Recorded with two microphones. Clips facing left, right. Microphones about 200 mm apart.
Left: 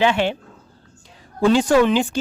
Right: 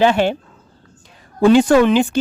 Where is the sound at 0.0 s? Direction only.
40° right (ahead or behind).